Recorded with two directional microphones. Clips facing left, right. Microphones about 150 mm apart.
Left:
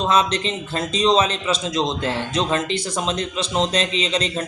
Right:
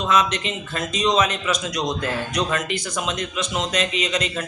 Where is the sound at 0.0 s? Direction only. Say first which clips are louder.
Left 2 dB; 30° left (ahead or behind).